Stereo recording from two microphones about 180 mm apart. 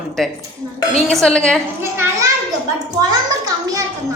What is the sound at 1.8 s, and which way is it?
Speech, 15° right (ahead or behind).